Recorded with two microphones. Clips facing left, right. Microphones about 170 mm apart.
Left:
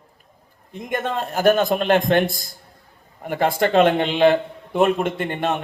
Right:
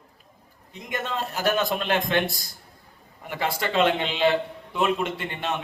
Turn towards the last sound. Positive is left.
turn(degrees=50)  # may be behind; listen again after turning